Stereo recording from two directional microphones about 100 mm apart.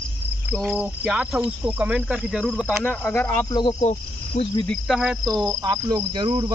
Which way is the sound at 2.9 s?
15° left (ahead or behind).